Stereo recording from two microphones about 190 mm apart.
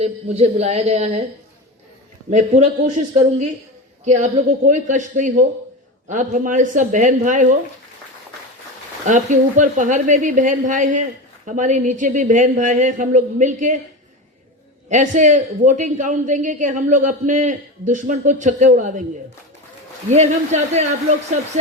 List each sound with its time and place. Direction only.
0.0 s a man's voice: 35° right (ahead or behind)
2.3 s a man's voice: 40° right (ahead or behind)
9.0 s a man's voice: 40° right (ahead or behind)
14.8 s a man's voice: 40° right (ahead or behind)
20.1 s a man's voice: 35° right (ahead or behind)